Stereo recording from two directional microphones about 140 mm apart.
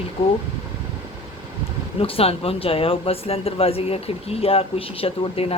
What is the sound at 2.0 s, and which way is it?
Speech, 45° left (ahead or behind).